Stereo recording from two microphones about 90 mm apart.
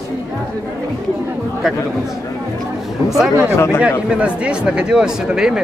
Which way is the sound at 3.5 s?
25° left (ahead or behind).